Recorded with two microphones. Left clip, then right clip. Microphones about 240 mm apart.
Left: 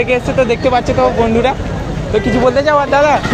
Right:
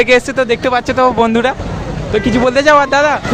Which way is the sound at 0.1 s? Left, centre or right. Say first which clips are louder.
Right 2 dB; right.